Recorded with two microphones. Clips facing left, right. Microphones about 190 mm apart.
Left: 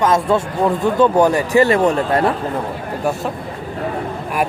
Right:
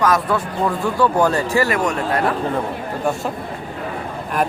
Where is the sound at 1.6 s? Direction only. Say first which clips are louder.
Left 5 dB; 30° left (ahead or behind).